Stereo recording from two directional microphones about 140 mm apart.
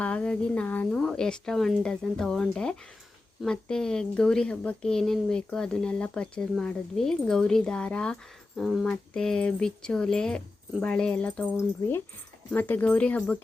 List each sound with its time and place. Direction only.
0.0 s speech: 10° left (ahead or behind)